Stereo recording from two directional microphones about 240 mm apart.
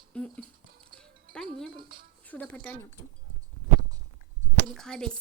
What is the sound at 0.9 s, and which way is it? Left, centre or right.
Music, centre.